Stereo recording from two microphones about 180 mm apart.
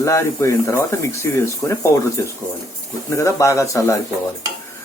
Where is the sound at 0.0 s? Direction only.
15° left (ahead or behind).